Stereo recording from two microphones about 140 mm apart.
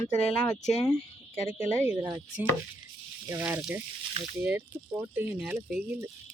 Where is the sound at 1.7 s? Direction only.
20° right (ahead or behind).